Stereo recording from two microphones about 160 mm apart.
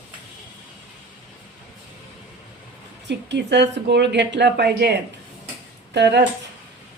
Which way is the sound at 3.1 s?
90° right.